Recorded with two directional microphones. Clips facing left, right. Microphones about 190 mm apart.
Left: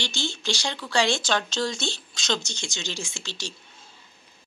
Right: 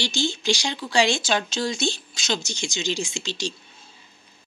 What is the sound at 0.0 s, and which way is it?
Speech, 10° right (ahead or behind).